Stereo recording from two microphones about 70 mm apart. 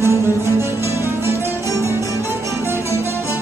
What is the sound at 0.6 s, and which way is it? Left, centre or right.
Music, right.